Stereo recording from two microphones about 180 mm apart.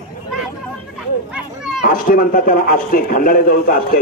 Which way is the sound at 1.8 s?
50° left (ahead or behind).